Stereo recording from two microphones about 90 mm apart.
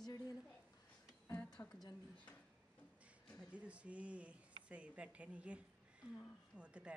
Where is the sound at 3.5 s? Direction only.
15° right (ahead or behind).